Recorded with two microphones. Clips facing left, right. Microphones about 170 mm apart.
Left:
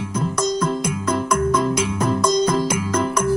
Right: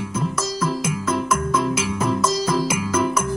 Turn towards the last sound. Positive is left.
turn(degrees=-5)  # may be behind; listen again after turning